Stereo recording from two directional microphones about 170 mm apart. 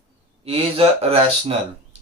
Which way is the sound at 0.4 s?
35° right (ahead or behind).